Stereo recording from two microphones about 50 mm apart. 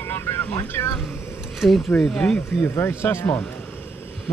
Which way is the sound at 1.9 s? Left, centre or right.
Centre.